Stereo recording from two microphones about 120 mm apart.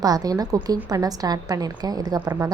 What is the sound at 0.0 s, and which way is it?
A woman's voice, 30° right (ahead or behind).